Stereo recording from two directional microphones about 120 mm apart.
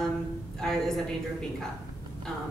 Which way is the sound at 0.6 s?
5° left (ahead or behind).